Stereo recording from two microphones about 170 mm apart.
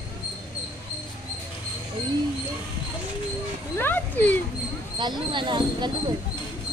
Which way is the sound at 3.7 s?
10° left (ahead or behind).